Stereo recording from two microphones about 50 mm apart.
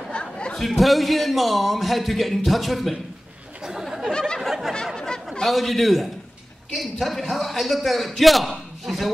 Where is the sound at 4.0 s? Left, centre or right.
Centre.